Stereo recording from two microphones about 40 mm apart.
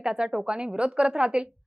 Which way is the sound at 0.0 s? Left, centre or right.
Centre.